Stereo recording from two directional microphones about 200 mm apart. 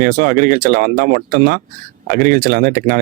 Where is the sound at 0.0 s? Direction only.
45° right (ahead or behind).